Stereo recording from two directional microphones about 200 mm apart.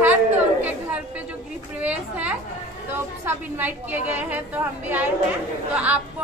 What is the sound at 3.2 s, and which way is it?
A woman's voice, 10° right (ahead or behind).